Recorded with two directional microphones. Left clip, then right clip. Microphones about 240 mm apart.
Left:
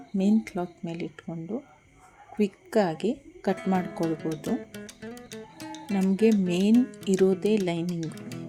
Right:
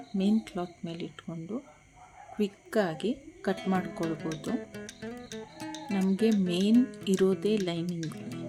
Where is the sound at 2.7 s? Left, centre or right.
Centre.